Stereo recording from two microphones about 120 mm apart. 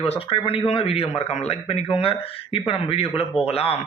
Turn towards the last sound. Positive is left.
turn(degrees=55)  # may be behind; listen again after turning